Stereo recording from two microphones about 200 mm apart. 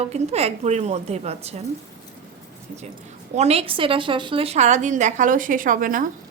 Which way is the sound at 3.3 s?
30° right (ahead or behind).